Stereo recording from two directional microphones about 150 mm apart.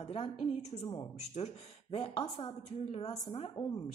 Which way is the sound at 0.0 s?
40° left (ahead or behind).